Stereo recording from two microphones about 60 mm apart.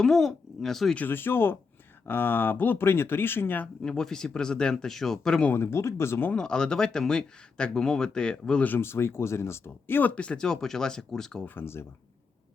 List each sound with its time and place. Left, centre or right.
0.0 s speech: centre
0.9 s speech: left
3.8 s speech: centre
5.5 s speech: left
6.3 s speech: centre
8.6 s speech: left
10.0 s speech: left
11.4 s speech: left